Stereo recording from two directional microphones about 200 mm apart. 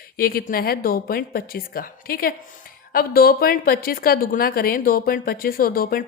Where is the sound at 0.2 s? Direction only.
45° left (ahead or behind).